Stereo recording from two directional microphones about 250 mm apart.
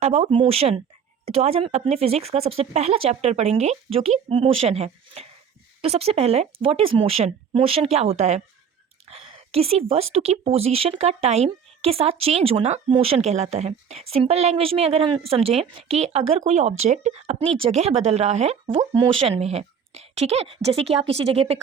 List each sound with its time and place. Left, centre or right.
0.0 s speech: right